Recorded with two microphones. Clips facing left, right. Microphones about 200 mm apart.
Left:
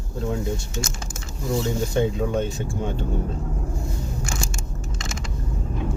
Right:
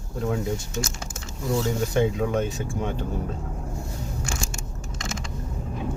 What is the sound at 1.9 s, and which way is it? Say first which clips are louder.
Speech: even; 30° left (ahead or behind).